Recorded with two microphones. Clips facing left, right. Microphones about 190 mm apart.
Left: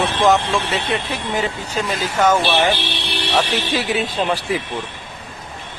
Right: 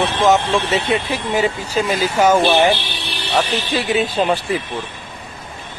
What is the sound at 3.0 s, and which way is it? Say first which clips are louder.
Vehicle: left 2 dB; 75° left (ahead or behind).